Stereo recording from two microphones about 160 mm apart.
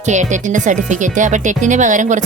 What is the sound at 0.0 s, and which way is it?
Speech, 50° right (ahead or behind).